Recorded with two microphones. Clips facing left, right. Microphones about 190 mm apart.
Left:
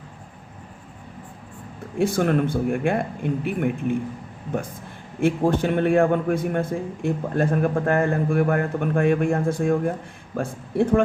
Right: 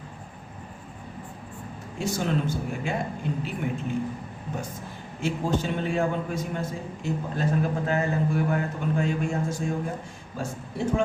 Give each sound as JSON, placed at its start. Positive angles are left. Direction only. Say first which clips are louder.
{"t": 2.0, "sound": "a man's voice", "louder": "left 7 dB", "side_deg": 55}
{"t": 5.2, "sound": "a man's voice", "louder": "left 7 dB", "side_deg": 60}